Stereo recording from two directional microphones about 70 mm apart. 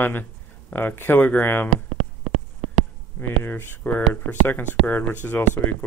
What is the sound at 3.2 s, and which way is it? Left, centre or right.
Speech, left.